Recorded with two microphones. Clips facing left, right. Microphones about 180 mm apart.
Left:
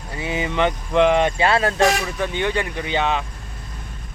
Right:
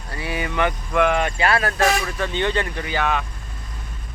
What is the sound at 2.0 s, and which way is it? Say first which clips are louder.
Speech: even; 15° left (ahead or behind).